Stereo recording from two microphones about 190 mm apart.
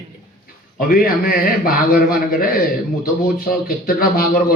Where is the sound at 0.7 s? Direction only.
50° left (ahead or behind).